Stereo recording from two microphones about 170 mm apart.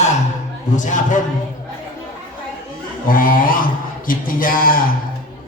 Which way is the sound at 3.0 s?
55° left (ahead or behind).